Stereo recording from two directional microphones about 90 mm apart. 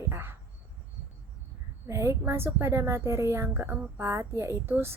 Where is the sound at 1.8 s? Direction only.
30° right (ahead or behind).